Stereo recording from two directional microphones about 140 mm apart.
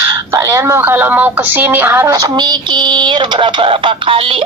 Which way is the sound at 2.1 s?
30° right (ahead or behind).